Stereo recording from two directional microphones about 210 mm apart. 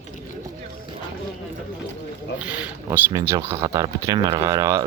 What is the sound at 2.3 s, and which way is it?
Speech, 5° right (ahead or behind).